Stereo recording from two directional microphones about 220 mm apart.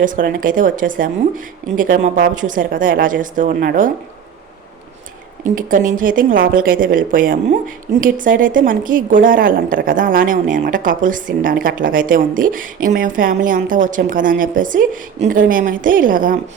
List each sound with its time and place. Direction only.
0.0 s a woman's voice: 40° right (ahead or behind)
5.5 s a woman's voice: 35° right (ahead or behind)